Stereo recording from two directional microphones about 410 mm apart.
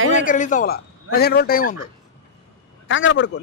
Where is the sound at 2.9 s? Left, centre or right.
Left.